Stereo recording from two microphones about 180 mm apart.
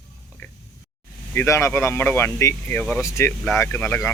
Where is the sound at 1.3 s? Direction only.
15° left (ahead or behind).